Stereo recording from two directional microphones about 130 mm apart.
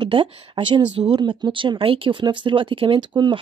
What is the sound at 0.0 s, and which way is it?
Speech, 40° right (ahead or behind).